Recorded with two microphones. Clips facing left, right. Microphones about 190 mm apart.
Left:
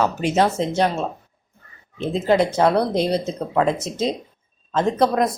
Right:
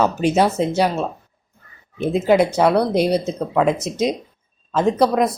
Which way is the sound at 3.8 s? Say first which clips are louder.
Right 3 dB; 30° left (ahead or behind).